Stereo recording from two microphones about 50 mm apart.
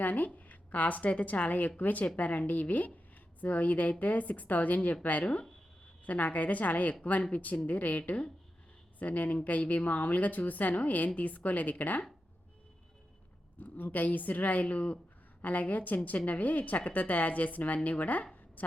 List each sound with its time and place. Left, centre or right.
0.0 s a woman's voice: left
13.6 s a woman's voice: left